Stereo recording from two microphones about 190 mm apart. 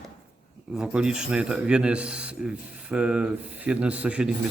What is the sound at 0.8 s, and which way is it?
Speech, 5° right (ahead or behind).